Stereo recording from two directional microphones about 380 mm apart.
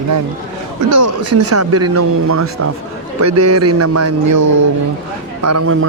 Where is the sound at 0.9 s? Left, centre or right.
Right.